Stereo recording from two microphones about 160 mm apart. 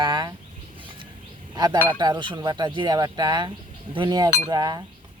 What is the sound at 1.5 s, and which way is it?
Speech, 25° right (ahead or behind).